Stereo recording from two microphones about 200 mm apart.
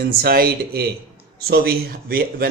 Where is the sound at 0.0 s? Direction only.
50° right (ahead or behind).